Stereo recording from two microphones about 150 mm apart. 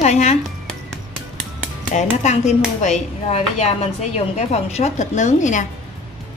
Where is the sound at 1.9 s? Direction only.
50° left (ahead or behind).